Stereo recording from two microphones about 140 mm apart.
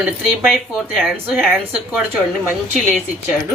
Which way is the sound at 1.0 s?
5° left (ahead or behind).